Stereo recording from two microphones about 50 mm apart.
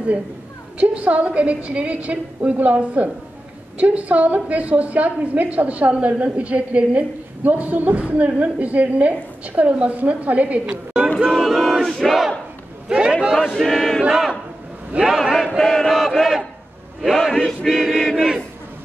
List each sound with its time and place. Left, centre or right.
0.7 s a woman's voice: right
7.4 s a woman's voice: right
11.3 s battle cry: centre
12.8 s a man's voice: centre
13.5 s chant: centre
15.0 s battle cry: centre
15.4 s chant: centre
17.0 s a sound: centre
17.6 s chant: centre